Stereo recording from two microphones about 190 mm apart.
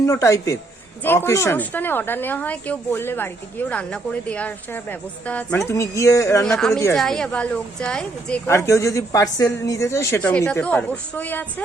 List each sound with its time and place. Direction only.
0.0 s a woman's voice: 15° left (ahead or behind)
6.4 s a woman's voice: 5° left (ahead or behind)